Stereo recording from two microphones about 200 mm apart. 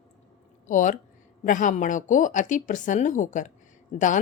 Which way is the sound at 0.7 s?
40° left (ahead or behind).